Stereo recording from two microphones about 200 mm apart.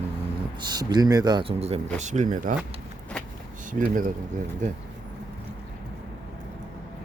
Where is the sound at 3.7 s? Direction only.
40° right (ahead or behind).